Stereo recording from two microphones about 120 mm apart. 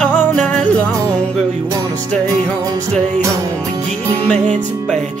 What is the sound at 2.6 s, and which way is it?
Music, 30° right (ahead or behind).